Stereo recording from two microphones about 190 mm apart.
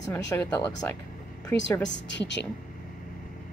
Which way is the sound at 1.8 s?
70° left (ahead or behind).